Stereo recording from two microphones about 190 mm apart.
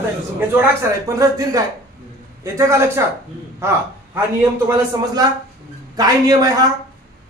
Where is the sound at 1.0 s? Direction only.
20° right (ahead or behind).